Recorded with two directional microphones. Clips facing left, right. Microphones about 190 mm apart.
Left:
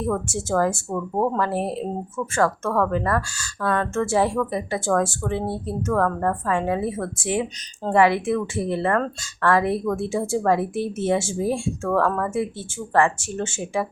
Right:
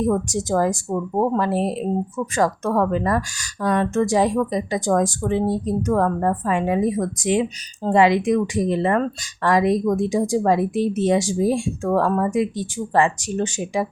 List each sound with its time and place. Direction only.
0.0 s speech: 15° right (ahead or behind)